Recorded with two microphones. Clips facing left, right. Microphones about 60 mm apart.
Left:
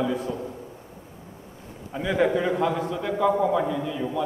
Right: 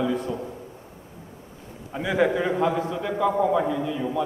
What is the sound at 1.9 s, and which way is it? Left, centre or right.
A man's voice, centre.